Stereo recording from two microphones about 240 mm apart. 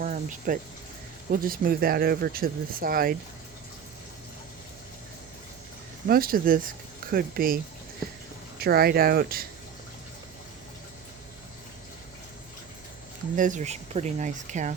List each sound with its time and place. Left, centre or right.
0.0 s speech: right
6.1 s speech: right
13.3 s speech: right